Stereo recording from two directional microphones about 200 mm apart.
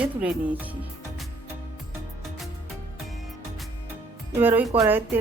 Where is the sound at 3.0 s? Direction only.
Centre (ahead or behind).